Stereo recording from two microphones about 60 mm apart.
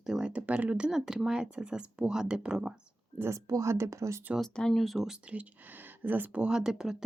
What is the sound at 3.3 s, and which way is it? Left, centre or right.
Speech, right.